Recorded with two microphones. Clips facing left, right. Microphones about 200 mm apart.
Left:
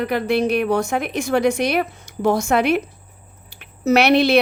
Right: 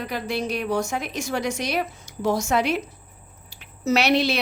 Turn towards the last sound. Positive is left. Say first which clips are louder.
# left 6 dB
turn(degrees=60)  # may be behind; listen again after turning